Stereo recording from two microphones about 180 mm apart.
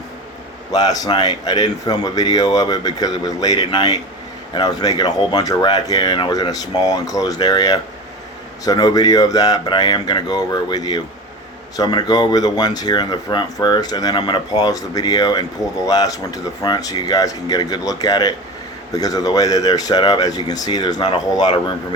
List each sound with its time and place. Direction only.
0.7 s speech: 20° left (ahead or behind)